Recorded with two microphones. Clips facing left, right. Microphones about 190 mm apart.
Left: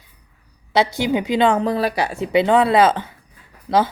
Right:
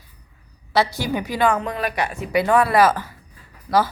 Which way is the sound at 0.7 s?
20° left (ahead or behind).